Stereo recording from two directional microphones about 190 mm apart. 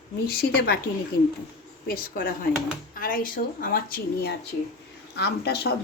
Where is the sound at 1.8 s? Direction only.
50° left (ahead or behind).